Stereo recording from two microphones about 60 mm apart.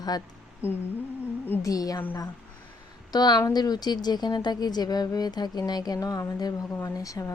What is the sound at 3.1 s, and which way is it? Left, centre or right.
Speech, left.